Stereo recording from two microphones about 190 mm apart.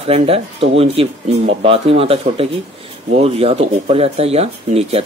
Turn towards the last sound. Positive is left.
turn(degrees=-30)  # may be behind; listen again after turning